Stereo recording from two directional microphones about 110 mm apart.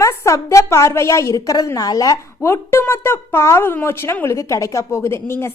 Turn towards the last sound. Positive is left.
turn(degrees=25)  # may be behind; listen again after turning